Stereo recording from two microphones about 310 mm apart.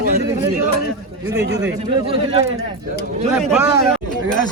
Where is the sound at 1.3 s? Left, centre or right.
Centre.